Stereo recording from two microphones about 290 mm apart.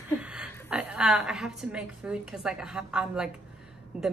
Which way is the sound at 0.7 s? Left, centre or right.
Centre.